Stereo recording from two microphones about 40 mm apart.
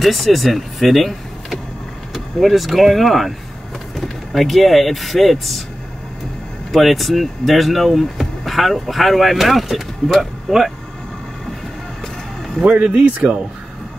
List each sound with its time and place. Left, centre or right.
0.0 s speech: centre
6.7 s speech: centre
12.8 s speech: right